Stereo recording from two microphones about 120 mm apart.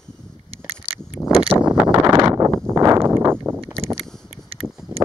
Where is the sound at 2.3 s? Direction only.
25° right (ahead or behind).